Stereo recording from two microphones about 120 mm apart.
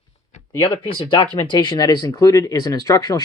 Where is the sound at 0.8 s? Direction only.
45° left (ahead or behind).